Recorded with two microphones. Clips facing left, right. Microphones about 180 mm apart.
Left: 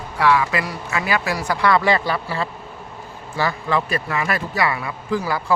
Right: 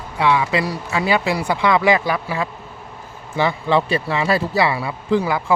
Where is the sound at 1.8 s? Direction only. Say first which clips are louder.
Right 2 dB; 10° right (ahead or behind).